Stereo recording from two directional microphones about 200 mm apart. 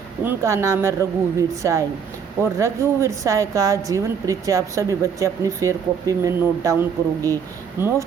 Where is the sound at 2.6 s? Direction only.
15° right (ahead or behind).